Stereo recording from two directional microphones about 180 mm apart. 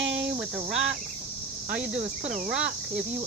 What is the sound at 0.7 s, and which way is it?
Speech, 90° right.